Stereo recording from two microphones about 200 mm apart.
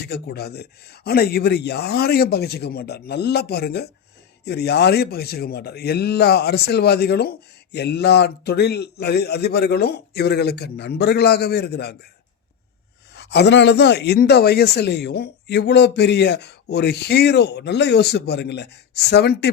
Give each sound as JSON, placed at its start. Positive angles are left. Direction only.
{"t": 0.1, "sound": "speech", "side_deg": 55}
{"t": 13.1, "sound": "speech", "side_deg": 60}